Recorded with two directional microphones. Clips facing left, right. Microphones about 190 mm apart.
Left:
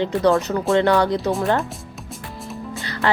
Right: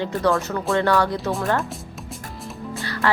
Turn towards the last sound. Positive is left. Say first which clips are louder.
# even
turn(degrees=20)  # may be behind; listen again after turning